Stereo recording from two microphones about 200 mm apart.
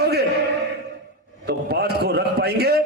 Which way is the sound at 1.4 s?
55° right (ahead or behind).